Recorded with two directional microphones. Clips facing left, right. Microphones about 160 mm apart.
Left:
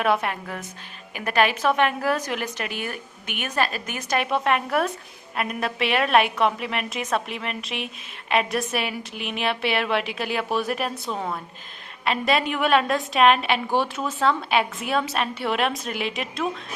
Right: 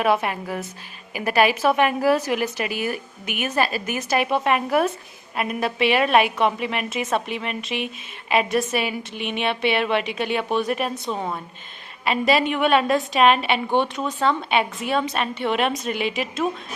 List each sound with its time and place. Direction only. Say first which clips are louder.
0.0 s a woman's voice: right 2 dB; 5° right (ahead or behind)